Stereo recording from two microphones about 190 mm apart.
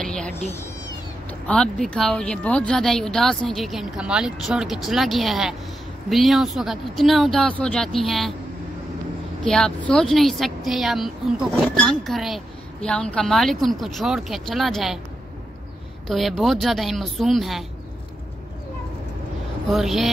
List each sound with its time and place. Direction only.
0.0 s cat: 5° left (ahead or behind)
0.3 s speech: 35° left (ahead or behind)
1.5 s speech: 5° left (ahead or behind)
9.4 s speech: 5° left (ahead or behind)
16.1 s speech: centre (ahead or behind)
19.7 s speech: centre (ahead or behind)